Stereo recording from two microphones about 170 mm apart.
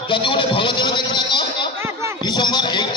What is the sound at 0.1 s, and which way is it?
A man's voice, 30° left (ahead or behind).